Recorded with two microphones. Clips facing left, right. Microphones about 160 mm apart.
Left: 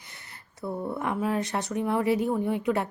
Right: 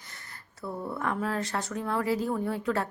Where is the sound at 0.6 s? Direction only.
20° left (ahead or behind).